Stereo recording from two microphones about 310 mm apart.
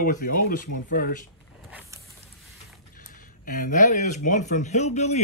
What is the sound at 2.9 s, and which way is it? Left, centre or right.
Speech, left.